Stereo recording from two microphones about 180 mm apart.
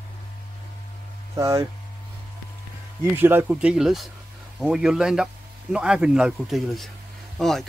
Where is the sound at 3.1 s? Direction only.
10° right (ahead or behind).